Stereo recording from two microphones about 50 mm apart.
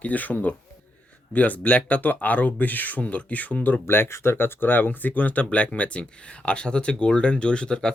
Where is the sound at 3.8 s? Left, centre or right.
Left.